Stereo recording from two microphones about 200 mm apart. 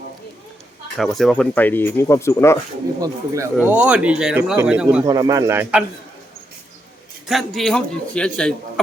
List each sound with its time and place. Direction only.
0.9 s speech: centre (ahead or behind)
3.0 s a man's voice: 15° right (ahead or behind)
5.0 s a man's voice: 20° right (ahead or behind)
7.3 s a man's voice: centre (ahead or behind)